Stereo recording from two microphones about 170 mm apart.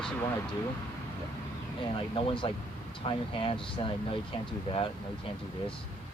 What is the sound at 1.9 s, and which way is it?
Speech, 30° left (ahead or behind).